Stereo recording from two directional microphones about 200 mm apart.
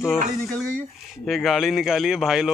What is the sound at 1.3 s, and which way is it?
A man's voice, centre (ahead or behind).